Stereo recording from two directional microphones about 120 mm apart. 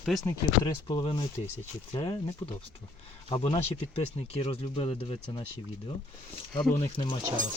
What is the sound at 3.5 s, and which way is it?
Speech, 60° left (ahead or behind).